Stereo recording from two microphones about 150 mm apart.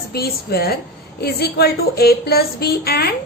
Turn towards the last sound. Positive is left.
turn(degrees=90)